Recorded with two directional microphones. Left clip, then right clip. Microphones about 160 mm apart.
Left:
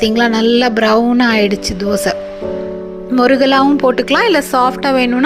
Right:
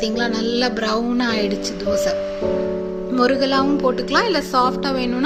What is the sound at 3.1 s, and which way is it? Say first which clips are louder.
Speech: left 7 dB; 45° left (ahead or behind).